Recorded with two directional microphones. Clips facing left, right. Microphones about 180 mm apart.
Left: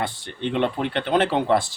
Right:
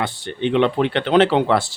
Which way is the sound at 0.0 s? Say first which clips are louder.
Right 5 dB; 75° right (ahead or behind).